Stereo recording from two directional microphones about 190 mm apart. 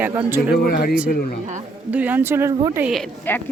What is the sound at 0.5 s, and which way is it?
Speech, 55° left (ahead or behind).